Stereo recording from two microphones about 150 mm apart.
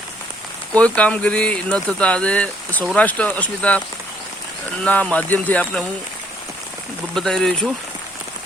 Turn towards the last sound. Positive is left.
turn(degrees=5)  # may be behind; listen again after turning